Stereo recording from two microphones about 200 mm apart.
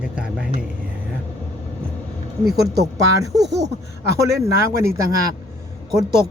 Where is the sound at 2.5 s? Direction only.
55° right (ahead or behind).